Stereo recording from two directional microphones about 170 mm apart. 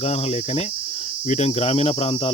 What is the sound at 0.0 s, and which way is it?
Cricket, 40° left (ahead or behind).